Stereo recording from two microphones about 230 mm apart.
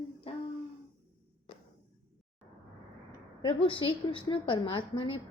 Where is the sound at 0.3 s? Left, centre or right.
Left.